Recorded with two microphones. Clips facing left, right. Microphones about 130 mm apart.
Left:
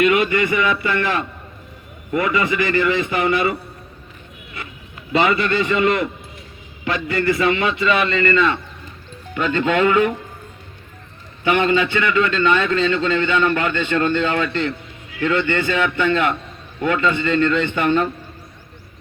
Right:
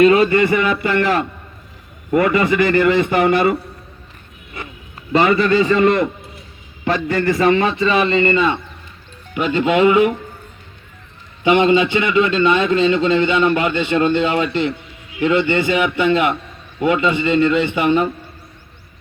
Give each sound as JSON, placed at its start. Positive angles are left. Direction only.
{"t": 0.0, "sound": "a man's voice", "side_deg": -35}
{"t": 5.1, "sound": "a man's voice", "side_deg": -45}
{"t": 11.4, "sound": "a man's voice", "side_deg": -15}